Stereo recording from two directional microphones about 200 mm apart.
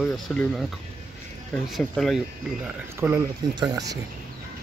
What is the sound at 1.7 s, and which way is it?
Speech, centre (ahead or behind).